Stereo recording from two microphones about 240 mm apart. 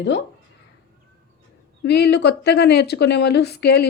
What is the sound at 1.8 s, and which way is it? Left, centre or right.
Speech, left.